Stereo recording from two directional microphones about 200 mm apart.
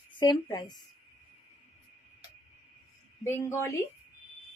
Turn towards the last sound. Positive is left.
turn(degrees=15)  # may be behind; listen again after turning